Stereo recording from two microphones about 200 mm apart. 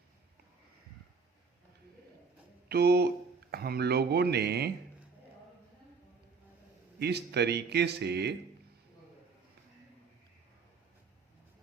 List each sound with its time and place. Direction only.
2.6 s speech: 55° right (ahead or behind)
7.0 s speech: 55° right (ahead or behind)